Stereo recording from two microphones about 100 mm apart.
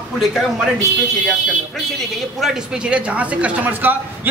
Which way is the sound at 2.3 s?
5° right (ahead or behind).